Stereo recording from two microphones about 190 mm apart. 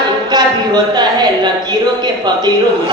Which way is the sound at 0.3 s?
20° right (ahead or behind).